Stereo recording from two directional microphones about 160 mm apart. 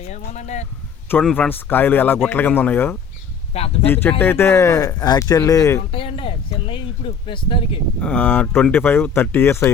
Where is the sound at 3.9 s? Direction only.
15° left (ahead or behind).